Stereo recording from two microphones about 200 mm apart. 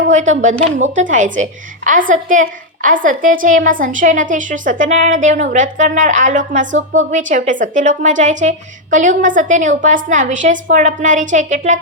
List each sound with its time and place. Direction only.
0.1 s a woman's voice: 40° right (ahead or behind)